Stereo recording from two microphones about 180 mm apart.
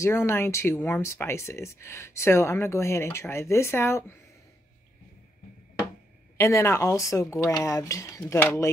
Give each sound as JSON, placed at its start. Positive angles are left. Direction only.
{"t": 0.0, "sound": "speech", "side_deg": 15}
{"t": 6.3, "sound": "speech", "side_deg": 15}